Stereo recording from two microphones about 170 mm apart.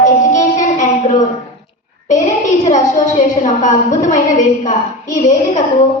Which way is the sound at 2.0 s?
45° left (ahead or behind).